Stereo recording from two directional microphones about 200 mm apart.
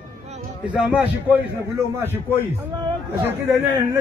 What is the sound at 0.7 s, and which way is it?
Speech, 5° right (ahead or behind).